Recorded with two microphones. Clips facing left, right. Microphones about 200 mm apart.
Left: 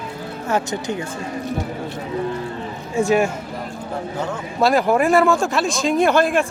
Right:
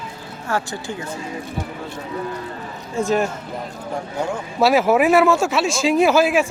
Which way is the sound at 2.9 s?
10° left (ahead or behind).